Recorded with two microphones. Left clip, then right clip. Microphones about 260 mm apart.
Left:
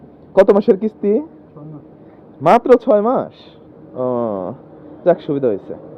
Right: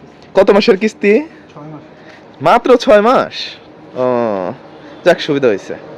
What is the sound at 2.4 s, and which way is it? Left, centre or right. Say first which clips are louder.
Speech: right 2 dB; right.